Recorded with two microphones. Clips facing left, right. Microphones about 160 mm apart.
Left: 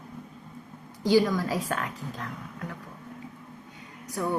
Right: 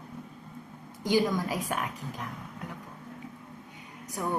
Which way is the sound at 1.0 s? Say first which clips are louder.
Left 4 dB; 20° right (ahead or behind).